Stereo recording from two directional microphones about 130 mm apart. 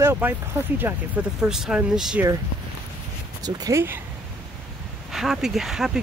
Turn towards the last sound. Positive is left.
turn(degrees=-5)  # may be behind; listen again after turning